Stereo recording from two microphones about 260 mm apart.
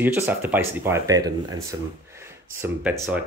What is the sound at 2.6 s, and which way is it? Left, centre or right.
Speech, centre.